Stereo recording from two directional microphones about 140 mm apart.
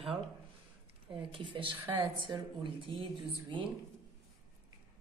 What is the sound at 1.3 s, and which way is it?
A woman's voice, 35° right (ahead or behind).